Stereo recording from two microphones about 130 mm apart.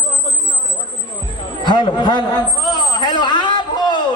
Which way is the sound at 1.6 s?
35° left (ahead or behind).